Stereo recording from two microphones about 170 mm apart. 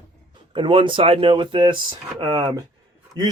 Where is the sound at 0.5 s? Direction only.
30° right (ahead or behind).